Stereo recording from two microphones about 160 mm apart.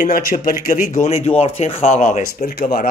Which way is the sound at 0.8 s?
45° left (ahead or behind).